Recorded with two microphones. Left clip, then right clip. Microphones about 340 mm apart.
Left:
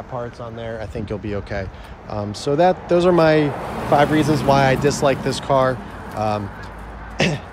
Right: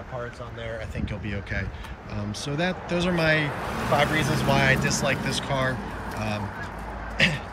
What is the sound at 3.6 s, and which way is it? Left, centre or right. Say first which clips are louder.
Speech: left 7 dB; left.